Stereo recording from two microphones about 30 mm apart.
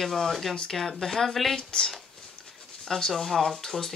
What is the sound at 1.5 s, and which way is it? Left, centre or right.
Speech, left.